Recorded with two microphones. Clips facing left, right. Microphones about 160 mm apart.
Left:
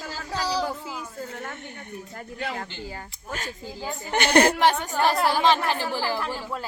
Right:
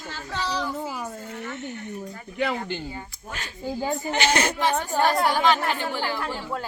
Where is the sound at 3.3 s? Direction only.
45° left (ahead or behind).